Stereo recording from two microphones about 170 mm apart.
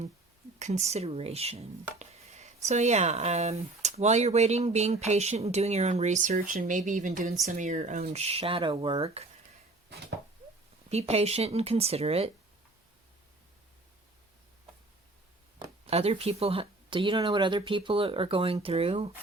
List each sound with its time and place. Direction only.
0.6 s speech: 40° right (ahead or behind)
2.0 s chopping: 40° right (ahead or behind)
2.6 s speech: 40° right (ahead or behind)
10.8 s speech: 40° right (ahead or behind)
15.9 s speech: 35° right (ahead or behind)